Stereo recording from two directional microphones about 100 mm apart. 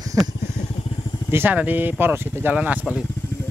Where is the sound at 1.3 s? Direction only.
20° right (ahead or behind).